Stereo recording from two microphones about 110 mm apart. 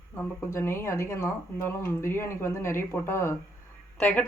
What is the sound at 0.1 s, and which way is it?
Speech, 20° left (ahead or behind).